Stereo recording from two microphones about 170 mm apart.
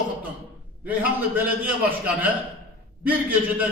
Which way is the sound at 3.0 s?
10° right (ahead or behind).